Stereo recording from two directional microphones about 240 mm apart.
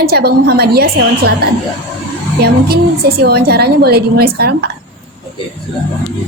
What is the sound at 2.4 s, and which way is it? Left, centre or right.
A woman's voice, right.